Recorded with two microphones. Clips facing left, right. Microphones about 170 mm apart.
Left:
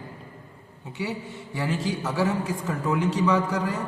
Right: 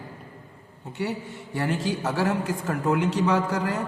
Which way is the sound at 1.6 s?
60° right (ahead or behind).